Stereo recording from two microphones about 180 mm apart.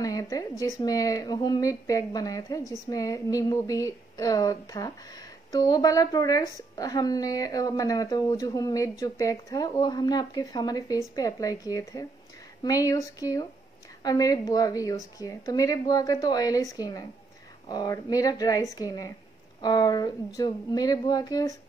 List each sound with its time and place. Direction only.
0.0 s a woman's voice: 20° left (ahead or behind)